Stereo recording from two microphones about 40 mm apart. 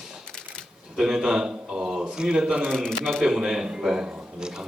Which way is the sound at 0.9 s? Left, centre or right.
Centre.